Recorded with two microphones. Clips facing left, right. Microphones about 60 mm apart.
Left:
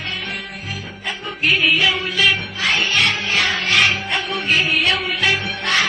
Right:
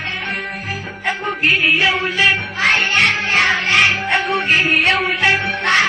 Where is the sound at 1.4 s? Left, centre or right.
Right.